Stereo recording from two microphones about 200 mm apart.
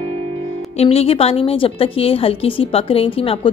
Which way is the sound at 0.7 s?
30° left (ahead or behind).